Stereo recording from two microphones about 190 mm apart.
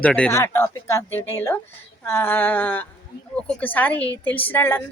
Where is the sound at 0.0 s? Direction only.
5° left (ahead or behind).